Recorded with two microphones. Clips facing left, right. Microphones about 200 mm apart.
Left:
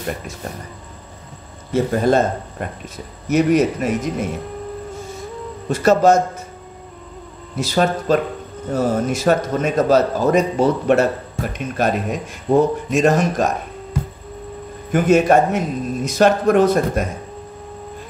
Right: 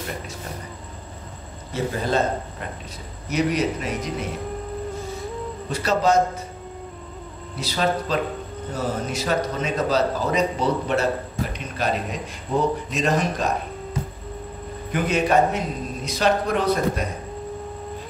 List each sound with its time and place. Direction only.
1.7 s a man's voice: 50° left (ahead or behind)
3.3 s a man's voice: 50° left (ahead or behind)
5.7 s a man's voice: 45° left (ahead or behind)
7.5 s a man's voice: 50° left (ahead or behind)
14.9 s a man's voice: 45° left (ahead or behind)